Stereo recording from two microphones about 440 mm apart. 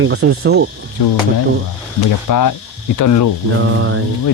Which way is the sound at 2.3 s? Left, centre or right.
Left.